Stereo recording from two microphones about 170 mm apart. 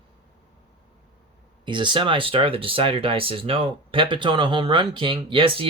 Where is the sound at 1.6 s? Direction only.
30° right (ahead or behind).